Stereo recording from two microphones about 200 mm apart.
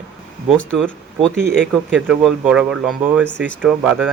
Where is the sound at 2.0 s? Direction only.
5° right (ahead or behind).